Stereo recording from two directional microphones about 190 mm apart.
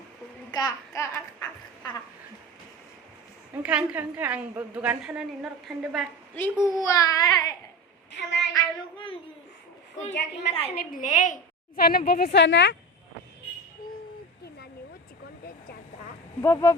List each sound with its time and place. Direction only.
0.5 s a sound: 20° left (ahead or behind)
3.6 s a woman's voice: 5° right (ahead or behind)
6.8 s a sound: 20° left (ahead or behind)
8.1 s a sound: 70° left (ahead or behind)
8.5 s child singing: 25° left (ahead or behind)
10.5 s a woman's voice: 30° left (ahead or behind)
10.8 s a woman's voice: 45° left (ahead or behind)
11.8 s a woman's voice: 50° left (ahead or behind); by 12.7 s 70° left (ahead or behind)
16.4 s speech: 15° left (ahead or behind)